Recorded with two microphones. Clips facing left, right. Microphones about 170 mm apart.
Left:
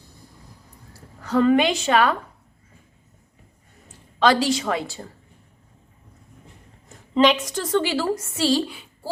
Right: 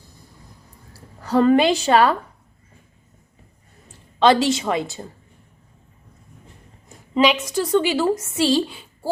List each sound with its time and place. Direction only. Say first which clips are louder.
1.2 s a woman's voice: right 2 dB; 35° right (ahead or behind)
4.2 s a woman's voice: right 3 dB; 25° right (ahead or behind)
6.8 s a woman's voice: even; 5° right (ahead or behind); by 8.8 s 25° right (ahead or behind)